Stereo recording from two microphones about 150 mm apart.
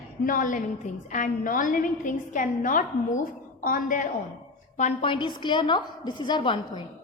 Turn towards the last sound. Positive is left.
turn(degrees=30)  # may be behind; listen again after turning